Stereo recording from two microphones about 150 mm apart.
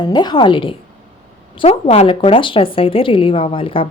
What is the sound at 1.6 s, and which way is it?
Speech, 45° left (ahead or behind).